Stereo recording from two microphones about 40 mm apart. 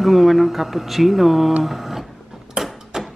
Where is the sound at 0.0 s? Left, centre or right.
Centre.